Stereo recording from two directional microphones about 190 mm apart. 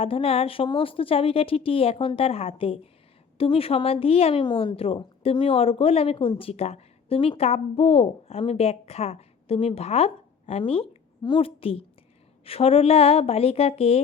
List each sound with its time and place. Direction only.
0.0 s a woman's voice: 30° left (ahead or behind)